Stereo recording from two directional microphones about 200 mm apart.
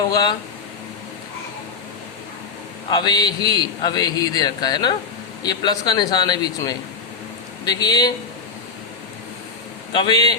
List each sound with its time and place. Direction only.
0.1 s a man's voice: 20° left (ahead or behind)
2.9 s a man's voice: 20° left (ahead or behind)
9.9 s a man's voice: 20° left (ahead or behind)